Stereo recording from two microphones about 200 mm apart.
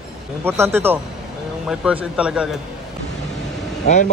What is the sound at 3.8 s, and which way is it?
Speech, 35° left (ahead or behind).